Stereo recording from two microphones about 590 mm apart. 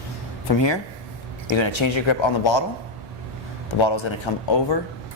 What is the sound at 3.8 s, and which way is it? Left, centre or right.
Speech, left.